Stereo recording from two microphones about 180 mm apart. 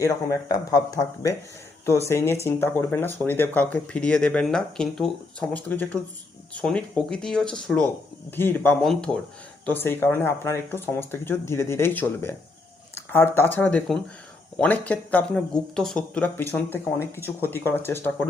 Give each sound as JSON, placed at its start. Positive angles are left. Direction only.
{"t": 0.0, "sound": "speech", "side_deg": 20}